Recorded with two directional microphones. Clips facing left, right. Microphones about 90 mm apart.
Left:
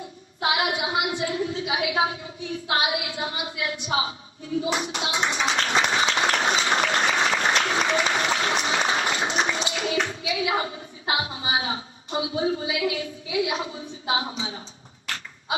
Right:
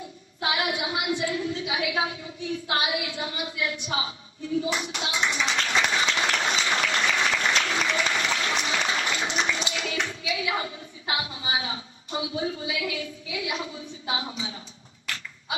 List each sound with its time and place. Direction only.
0.5 s a woman's voice: 35° left (ahead or behind)
4.6 s a sound: 35° left (ahead or behind)
14.1 s a woman's voice: 30° left (ahead or behind)